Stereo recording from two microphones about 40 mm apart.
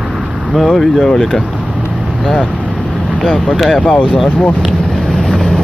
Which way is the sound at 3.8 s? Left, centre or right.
Left.